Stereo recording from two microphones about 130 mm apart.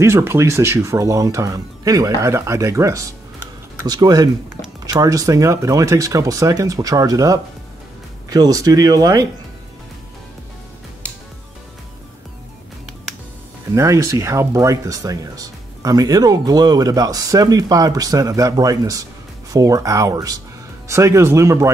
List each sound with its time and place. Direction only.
0.0 s speech: 20° right (ahead or behind)
13.7 s speech: 25° right (ahead or behind)